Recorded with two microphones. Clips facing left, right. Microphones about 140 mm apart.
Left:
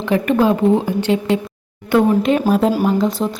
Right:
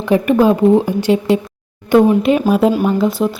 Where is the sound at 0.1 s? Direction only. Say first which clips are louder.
Right 3 dB; 15° right (ahead or behind).